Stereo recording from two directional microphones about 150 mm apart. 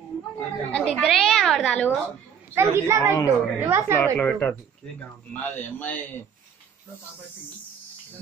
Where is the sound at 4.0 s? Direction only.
10° left (ahead or behind).